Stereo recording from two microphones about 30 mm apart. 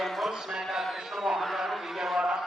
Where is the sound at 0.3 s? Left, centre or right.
Centre.